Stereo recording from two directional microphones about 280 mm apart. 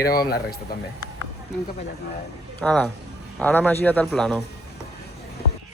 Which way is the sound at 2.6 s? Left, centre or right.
Centre.